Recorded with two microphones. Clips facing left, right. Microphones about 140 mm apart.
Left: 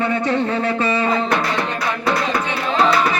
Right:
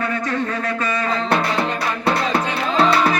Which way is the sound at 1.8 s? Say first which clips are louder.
Even; 30° right (ahead or behind).